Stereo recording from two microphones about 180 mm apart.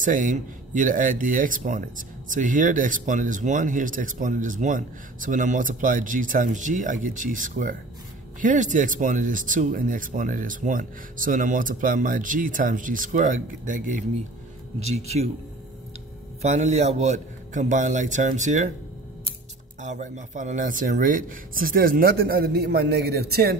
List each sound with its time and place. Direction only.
0.0 s speech: 45° right (ahead or behind)
16.4 s speech: 40° right (ahead or behind)
19.8 s speech: 40° right (ahead or behind); by 23.5 s 60° right (ahead or behind)